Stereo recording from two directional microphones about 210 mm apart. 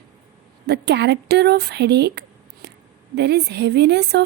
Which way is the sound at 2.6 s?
50° right (ahead or behind).